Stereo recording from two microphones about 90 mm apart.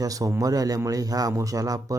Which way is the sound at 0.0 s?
40° right (ahead or behind).